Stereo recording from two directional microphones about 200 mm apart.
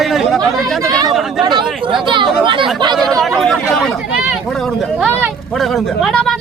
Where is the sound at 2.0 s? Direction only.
25° right (ahead or behind).